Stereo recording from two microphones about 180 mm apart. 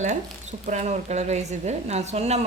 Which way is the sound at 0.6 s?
40° right (ahead or behind).